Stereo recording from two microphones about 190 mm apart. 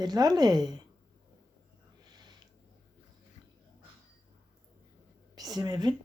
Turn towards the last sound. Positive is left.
turn(degrees=-20)  # may be behind; listen again after turning